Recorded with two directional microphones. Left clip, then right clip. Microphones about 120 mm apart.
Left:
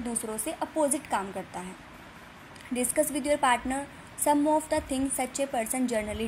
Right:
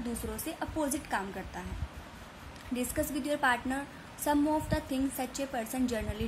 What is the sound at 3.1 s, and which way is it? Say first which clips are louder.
A woman's voice: left 3 dB; 20° left (ahead or behind).